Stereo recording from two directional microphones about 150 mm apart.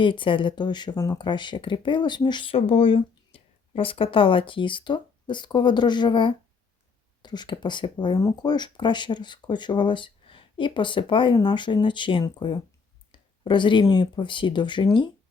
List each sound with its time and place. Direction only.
0.0 s speech: 35° left (ahead or behind)